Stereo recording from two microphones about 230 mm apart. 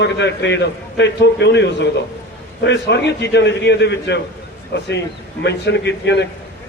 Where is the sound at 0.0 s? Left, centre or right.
Left.